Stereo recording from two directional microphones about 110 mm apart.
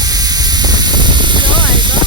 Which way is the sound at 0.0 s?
35° right (ahead or behind).